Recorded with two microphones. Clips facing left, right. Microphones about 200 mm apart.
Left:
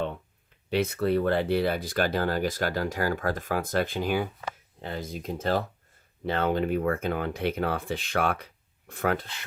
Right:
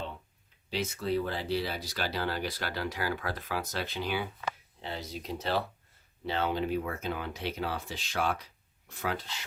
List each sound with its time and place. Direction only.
0.7 s speech: 60° left (ahead or behind)